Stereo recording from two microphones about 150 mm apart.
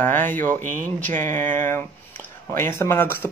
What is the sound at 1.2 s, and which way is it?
Speech, 15° left (ahead or behind).